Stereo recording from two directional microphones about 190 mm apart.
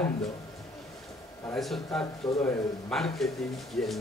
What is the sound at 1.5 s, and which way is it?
Speech, centre (ahead or behind).